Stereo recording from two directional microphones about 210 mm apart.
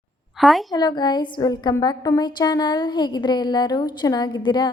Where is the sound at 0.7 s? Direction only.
20° left (ahead or behind).